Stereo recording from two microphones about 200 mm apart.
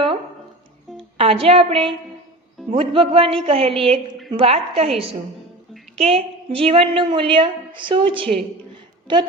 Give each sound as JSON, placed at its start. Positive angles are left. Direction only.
{"t": 1.2, "sound": "a woman's voice", "side_deg": -30}